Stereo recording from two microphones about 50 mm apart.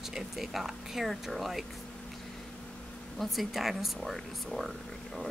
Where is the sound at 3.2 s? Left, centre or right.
Centre.